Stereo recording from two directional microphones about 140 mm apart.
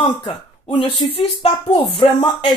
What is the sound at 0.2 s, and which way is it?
Speech, 35° left (ahead or behind).